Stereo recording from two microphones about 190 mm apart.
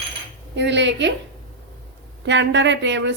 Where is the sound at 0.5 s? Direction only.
70° right (ahead or behind).